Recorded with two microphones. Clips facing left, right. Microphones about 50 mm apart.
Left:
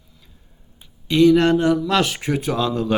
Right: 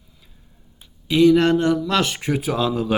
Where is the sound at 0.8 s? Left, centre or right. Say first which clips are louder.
Left 1 dB; centre.